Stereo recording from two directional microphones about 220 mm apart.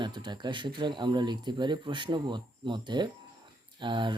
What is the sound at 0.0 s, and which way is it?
Speech, 20° right (ahead or behind).